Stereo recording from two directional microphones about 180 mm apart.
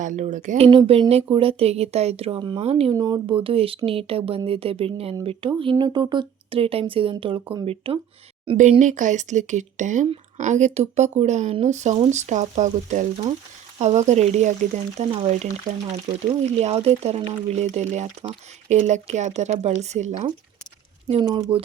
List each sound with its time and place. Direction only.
0.0 s speech: 45° right (ahead or behind)
0.7 s speech: 30° right (ahead or behind)
2.9 s speech: 20° right (ahead or behind)
8.8 s speech: 45° right (ahead or behind)
21.1 s speech: 25° right (ahead or behind)